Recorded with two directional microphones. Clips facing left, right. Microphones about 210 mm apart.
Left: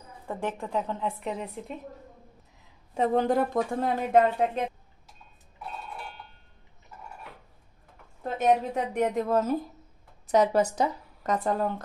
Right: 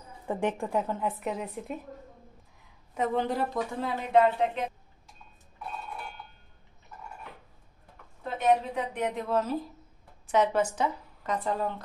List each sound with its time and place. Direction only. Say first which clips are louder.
0.3 s a woman's voice: right 2 dB; 15° right (ahead or behind); by 1.8 s centre (ahead or behind)
2.9 s speech: left 4 dB; 35° left (ahead or behind)
8.2 s a woman's voice: left 1 dB; 45° left (ahead or behind)